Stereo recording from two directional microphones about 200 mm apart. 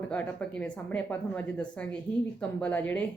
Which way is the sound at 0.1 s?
5° left (ahead or behind).